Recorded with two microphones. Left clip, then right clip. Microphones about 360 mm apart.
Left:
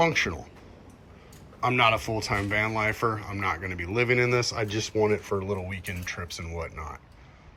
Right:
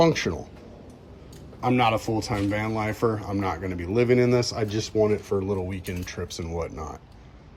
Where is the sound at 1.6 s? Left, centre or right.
Centre.